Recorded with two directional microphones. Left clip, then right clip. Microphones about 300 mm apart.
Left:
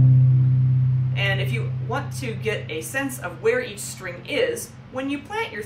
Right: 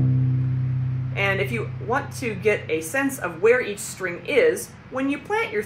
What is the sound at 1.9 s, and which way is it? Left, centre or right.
Speech, centre.